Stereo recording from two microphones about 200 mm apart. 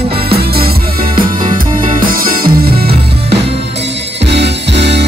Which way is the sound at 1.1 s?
25° right (ahead or behind).